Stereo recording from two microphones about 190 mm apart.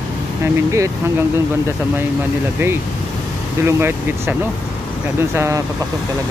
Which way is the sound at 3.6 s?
15° right (ahead or behind).